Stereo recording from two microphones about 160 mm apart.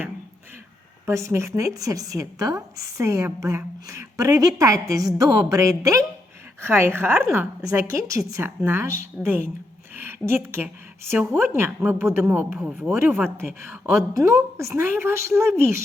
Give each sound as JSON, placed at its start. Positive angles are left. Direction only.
{"t": 1.0, "sound": "a woman's voice", "side_deg": -15}
{"t": 9.9, "sound": "a sound", "side_deg": -15}
{"t": 10.2, "sound": "speech", "side_deg": -15}